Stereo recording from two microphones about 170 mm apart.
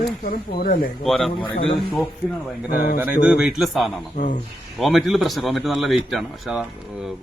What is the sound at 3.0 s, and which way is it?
Speech, 5° right (ahead or behind).